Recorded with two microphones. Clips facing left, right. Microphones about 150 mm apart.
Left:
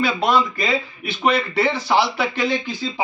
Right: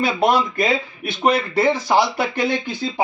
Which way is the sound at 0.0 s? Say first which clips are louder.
Right 1 dB; 50° right (ahead or behind).